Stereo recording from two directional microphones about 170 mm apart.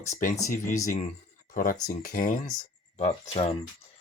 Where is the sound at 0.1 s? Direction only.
50° left (ahead or behind).